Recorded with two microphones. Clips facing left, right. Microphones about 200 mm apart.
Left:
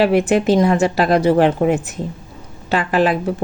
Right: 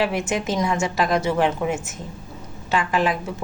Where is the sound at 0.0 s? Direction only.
60° left (ahead or behind).